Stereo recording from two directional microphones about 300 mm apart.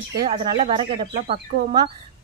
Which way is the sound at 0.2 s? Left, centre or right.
Centre.